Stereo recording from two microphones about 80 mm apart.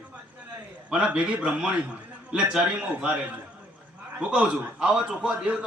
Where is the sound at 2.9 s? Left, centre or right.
Centre.